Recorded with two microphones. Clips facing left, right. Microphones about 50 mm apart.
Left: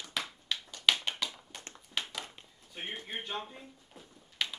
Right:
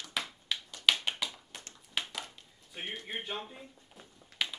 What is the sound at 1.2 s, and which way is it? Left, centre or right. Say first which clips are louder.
Tap: even; centre.